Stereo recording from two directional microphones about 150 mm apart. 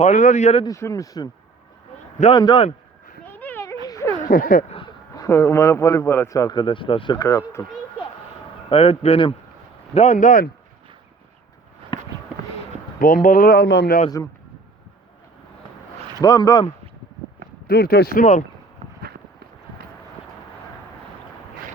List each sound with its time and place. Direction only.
0.0 s speech: 50° left (ahead or behind)
0.6 s a man's voice: 20° left (ahead or behind)
2.3 s speech: 30° left (ahead or behind)
3.2 s a sound: 10° left (ahead or behind)
4.2 s speech: 70° left (ahead or behind)
5.1 s a man's voice: 20° left (ahead or behind); by 7.2 s 35° left (ahead or behind)
7.2 s a man's voice: 20° left (ahead or behind)
8.7 s speech: 40° left (ahead or behind)
9.9 s speech: 50° left (ahead or behind)
13.0 s speech: 65° left (ahead or behind); by 14.0 s 90° left
16.2 s a man's voice: 25° left (ahead or behind)
17.7 s speech: 90° left; by 18.4 s 60° left (ahead or behind)